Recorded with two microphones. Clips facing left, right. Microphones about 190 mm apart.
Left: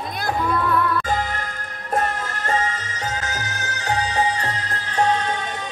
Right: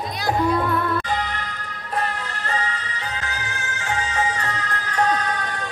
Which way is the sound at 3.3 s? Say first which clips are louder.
Left 2 dB; 40° left (ahead or behind).